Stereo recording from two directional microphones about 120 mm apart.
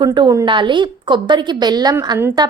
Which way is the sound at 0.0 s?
35° right (ahead or behind).